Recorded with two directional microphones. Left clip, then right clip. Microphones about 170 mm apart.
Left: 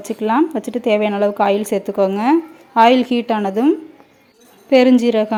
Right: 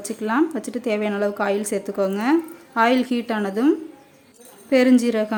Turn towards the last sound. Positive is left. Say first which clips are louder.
# left 5 dB
turn(degrees=15)  # may be behind; listen again after turning